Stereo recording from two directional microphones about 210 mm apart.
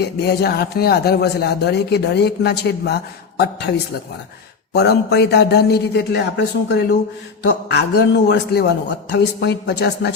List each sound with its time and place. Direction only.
0.0 s speech: 50° left (ahead or behind)
4.7 s speech: 50° left (ahead or behind)